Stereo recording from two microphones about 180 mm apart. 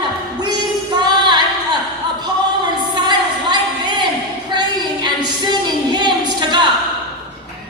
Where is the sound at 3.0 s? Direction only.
25° right (ahead or behind).